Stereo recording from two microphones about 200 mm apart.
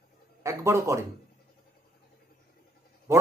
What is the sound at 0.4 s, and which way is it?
Speech, 15° right (ahead or behind).